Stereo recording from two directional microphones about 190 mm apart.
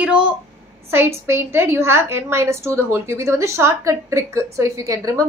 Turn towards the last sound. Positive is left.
turn(degrees=-15)  # may be behind; listen again after turning